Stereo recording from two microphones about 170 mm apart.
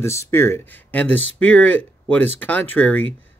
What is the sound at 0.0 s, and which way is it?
Speech, 15° left (ahead or behind).